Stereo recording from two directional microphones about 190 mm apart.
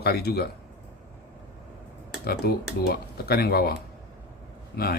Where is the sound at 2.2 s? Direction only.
55° left (ahead or behind).